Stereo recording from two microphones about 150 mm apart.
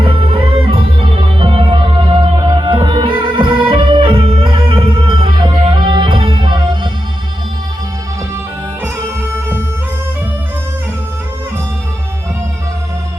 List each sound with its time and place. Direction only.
0.0 s music: 40° right (ahead or behind)
9.3 s bagpipes: 15° right (ahead or behind)